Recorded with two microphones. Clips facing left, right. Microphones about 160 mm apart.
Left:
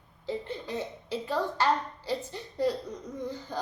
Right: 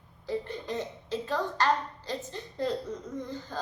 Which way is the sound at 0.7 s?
15° left (ahead or behind).